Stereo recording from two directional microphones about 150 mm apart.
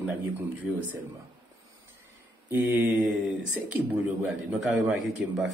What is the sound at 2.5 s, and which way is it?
Speech, 10° right (ahead or behind).